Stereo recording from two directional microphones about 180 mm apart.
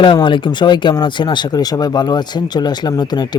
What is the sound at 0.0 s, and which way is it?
Speech, 25° left (ahead or behind).